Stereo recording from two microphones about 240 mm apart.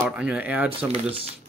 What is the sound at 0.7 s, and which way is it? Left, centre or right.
Speech, right.